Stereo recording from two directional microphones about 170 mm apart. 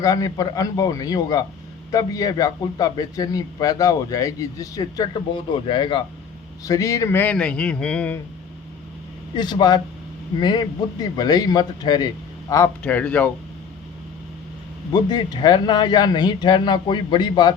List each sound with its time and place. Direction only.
0.0 s a man's voice: 20° left (ahead or behind)
9.3 s a man's voice: 25° left (ahead or behind)
12.8 s a man's voice: 10° left (ahead or behind)
14.9 s a man's voice: 25° left (ahead or behind)